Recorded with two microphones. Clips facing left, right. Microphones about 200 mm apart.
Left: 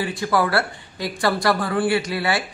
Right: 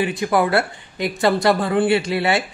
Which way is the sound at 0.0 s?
20° right (ahead or behind).